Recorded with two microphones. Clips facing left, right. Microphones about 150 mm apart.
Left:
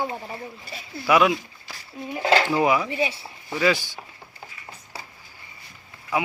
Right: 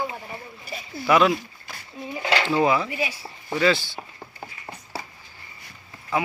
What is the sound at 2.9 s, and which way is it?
Speech, 25° left (ahead or behind).